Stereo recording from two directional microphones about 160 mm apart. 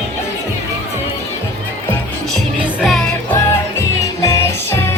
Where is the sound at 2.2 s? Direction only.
Centre (ahead or behind).